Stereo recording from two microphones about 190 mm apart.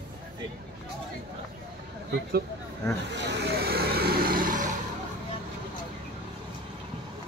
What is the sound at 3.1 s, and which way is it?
Vehicle, 65° right (ahead or behind).